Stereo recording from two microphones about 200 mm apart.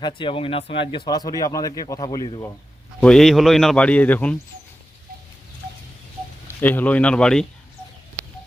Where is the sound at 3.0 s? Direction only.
Centre (ahead or behind).